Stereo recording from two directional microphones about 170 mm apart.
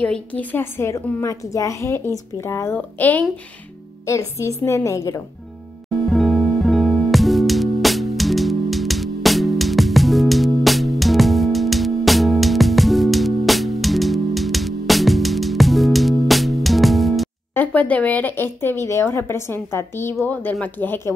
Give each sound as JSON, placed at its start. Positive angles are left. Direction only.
{"t": 0.0, "sound": "speech", "side_deg": 10}
{"t": 6.0, "sound": "music", "side_deg": 0}
{"t": 17.6, "sound": "speech", "side_deg": 10}